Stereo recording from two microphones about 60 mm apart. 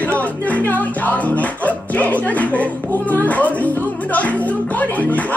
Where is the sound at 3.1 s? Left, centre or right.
Left.